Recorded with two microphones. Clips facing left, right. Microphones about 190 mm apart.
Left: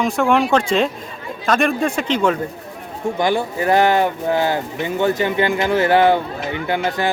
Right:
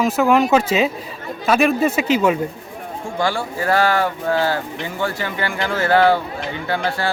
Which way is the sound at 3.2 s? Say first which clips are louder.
Left 2 dB; 20° left (ahead or behind).